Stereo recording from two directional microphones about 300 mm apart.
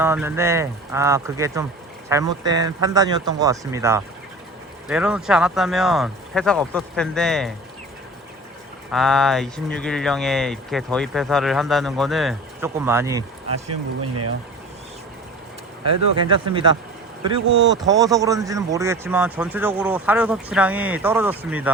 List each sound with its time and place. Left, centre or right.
0.0 s a man's voice: centre
8.9 s speech: centre
13.7 s speech: right
16.5 s a man's voice: centre
17.8 s a man's voice: centre